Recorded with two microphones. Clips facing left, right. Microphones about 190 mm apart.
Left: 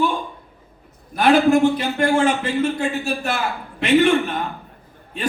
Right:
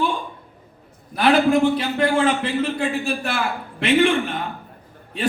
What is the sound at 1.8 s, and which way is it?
Speech, 45° left (ahead or behind).